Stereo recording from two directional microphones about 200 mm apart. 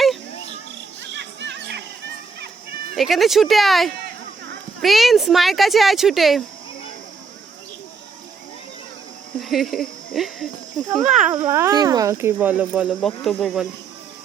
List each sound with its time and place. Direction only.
1.1 s music: 60° right (ahead or behind)
2.9 s speech: centre (ahead or behind)
9.4 s speech: centre (ahead or behind)
11.3 s speech: 15° right (ahead or behind)